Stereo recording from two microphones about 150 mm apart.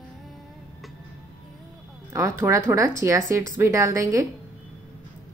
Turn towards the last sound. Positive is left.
turn(degrees=-20)  # may be behind; listen again after turning